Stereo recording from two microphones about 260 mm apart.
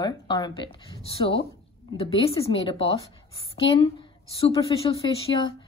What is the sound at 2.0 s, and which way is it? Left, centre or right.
Speech, left.